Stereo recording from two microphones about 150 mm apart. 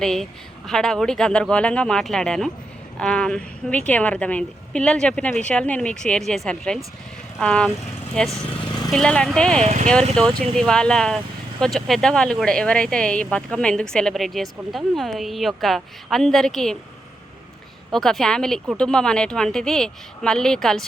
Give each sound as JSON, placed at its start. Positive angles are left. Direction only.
{"t": 0.0, "sound": "a woman's voice", "side_deg": 5}
{"t": 9.6, "sound": "speech", "side_deg": -55}
{"t": 10.2, "sound": "speech", "side_deg": 5}
{"t": 17.9, "sound": "speech", "side_deg": 5}